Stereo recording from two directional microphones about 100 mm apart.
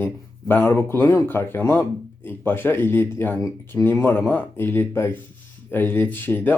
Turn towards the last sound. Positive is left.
turn(degrees=20)  # may be behind; listen again after turning